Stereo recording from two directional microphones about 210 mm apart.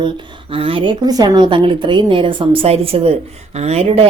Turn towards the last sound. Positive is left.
turn(degrees=-30)  # may be behind; listen again after turning